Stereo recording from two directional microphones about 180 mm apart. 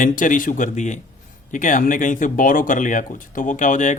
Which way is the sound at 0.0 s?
45° left (ahead or behind).